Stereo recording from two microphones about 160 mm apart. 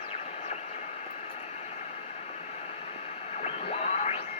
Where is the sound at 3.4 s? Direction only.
45° left (ahead or behind).